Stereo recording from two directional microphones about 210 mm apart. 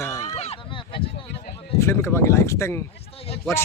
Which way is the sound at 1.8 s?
15° left (ahead or behind).